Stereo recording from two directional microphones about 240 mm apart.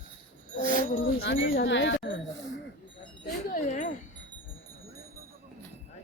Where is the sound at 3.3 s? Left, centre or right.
Left.